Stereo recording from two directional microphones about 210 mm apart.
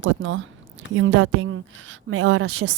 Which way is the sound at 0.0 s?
70° right (ahead or behind).